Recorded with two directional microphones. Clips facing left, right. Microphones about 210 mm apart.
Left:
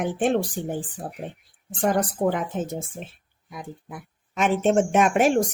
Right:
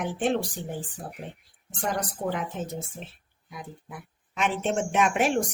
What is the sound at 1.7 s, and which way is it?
A woman's voice, 50° left (ahead or behind).